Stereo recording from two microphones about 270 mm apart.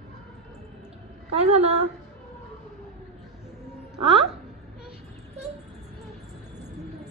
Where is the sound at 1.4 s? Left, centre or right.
Right.